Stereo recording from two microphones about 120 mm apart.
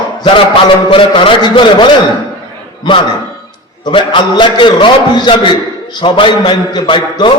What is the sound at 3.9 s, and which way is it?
A man's voice, 40° left (ahead or behind).